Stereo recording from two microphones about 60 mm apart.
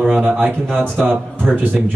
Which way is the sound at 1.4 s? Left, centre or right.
Centre.